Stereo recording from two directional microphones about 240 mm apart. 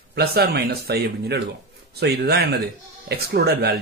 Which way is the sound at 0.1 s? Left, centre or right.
Right.